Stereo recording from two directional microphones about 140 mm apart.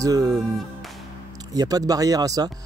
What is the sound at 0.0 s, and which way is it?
Speech, 25° right (ahead or behind).